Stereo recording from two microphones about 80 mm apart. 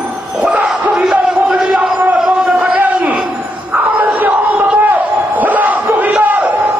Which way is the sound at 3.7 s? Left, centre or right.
Centre.